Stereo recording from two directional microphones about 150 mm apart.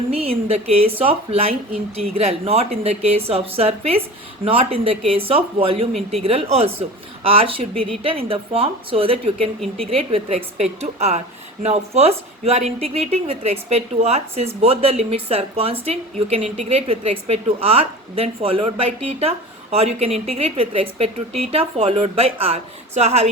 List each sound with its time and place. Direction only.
0.3 s speech: 40° right (ahead or behind)
5.9 s speech: centre (ahead or behind)
6.2 s speech: 40° right (ahead or behind)